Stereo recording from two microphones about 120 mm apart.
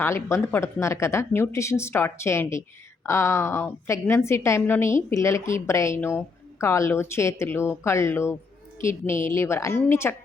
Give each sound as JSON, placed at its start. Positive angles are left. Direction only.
{"t": 0.0, "sound": "a woman's voice", "side_deg": 20}